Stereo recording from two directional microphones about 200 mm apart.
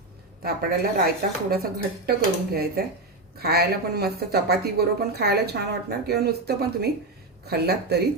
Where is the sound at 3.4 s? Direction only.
50° right (ahead or behind).